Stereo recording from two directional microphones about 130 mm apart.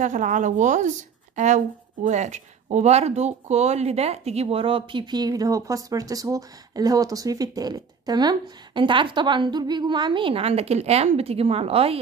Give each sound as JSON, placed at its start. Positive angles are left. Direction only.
{"t": 0.0, "sound": "a woman's voice", "side_deg": -70}